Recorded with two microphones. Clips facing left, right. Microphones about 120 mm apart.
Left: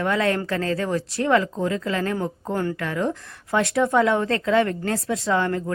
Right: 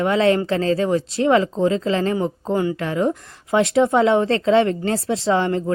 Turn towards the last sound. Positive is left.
turn(degrees=-25)  # may be behind; listen again after turning